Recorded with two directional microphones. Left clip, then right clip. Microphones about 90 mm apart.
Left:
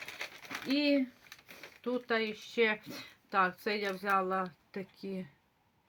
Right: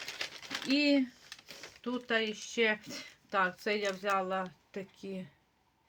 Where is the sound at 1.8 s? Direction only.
35° left (ahead or behind).